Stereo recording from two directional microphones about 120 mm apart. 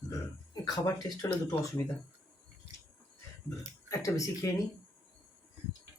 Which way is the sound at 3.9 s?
25° left (ahead or behind).